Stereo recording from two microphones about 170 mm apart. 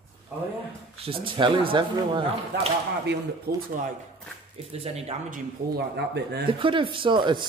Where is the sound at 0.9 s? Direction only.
35° right (ahead or behind).